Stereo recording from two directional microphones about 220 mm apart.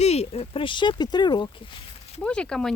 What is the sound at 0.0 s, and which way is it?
Speech, 30° left (ahead or behind).